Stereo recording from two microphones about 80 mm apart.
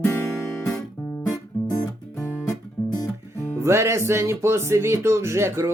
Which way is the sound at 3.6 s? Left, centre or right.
Right.